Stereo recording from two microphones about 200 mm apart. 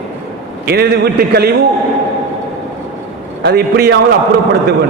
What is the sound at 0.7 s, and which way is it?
Speech, 55° right (ahead or behind).